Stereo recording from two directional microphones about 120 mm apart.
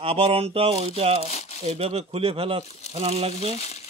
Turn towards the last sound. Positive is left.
turn(degrees=65)  # may be behind; listen again after turning